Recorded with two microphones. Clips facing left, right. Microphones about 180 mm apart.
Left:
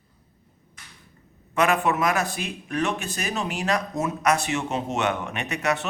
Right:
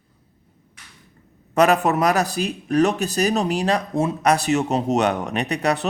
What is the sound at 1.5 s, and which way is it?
Speech, 40° right (ahead or behind).